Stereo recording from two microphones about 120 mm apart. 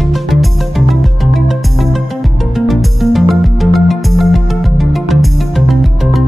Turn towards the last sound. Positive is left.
turn(degrees=0)  # may be behind; listen again after turning